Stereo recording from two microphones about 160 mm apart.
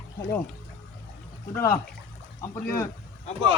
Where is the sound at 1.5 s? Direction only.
15° left (ahead or behind).